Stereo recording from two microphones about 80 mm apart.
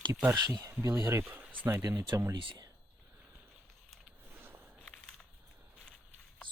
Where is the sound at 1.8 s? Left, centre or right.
Right.